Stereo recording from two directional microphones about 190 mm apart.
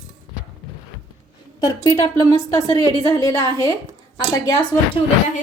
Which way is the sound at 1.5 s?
20° left (ahead or behind).